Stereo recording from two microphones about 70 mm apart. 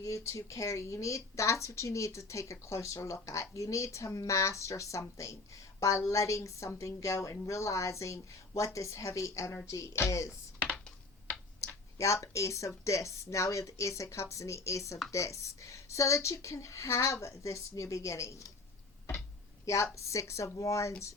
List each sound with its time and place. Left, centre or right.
0.0 s a woman's voice: left
11.3 s a woman's voice: left
19.6 s a woman's voice: left